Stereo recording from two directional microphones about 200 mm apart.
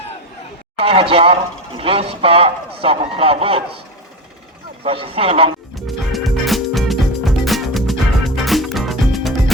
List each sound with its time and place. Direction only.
0.8 s speech: 25° right (ahead or behind)
4.8 s speech: 30° right (ahead or behind)
5.7 s music: centre (ahead or behind)